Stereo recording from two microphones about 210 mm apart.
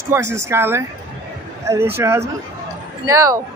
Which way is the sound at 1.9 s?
10° right (ahead or behind).